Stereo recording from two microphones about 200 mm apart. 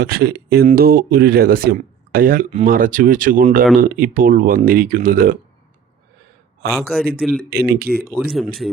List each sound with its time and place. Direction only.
0.0 s speech: 50° right (ahead or behind)
6.7 s speech: centre (ahead or behind)
7.5 s speech: 50° right (ahead or behind)
8.1 s speech: 5° right (ahead or behind)